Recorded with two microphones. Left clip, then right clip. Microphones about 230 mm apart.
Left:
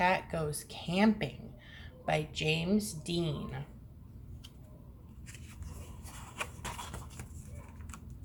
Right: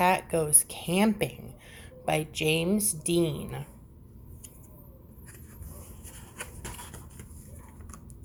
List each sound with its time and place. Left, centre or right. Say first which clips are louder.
0.0 s a woman's voice: right 5 dB; right